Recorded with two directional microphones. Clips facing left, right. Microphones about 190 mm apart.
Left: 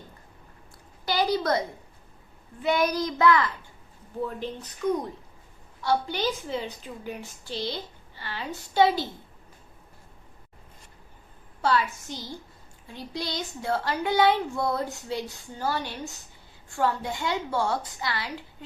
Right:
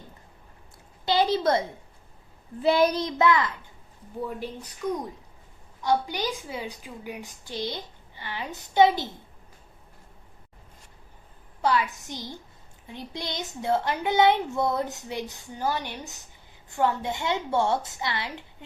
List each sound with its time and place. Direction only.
1.0 s a sound: 25° right (ahead or behind)
2.6 s speech: 30° right (ahead or behind)
4.3 s a woman's voice: 10° right (ahead or behind)
5.8 s a woman's voice: 15° right (ahead or behind)
11.6 s a woman's voice: 15° right (ahead or behind)